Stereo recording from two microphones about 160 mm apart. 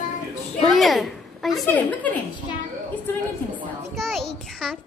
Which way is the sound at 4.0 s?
Centre (ahead or behind).